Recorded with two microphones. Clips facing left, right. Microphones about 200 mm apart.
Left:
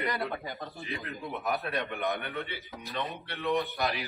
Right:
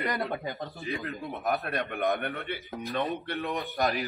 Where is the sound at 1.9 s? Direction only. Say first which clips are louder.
Right 4 dB; 50° right (ahead or behind).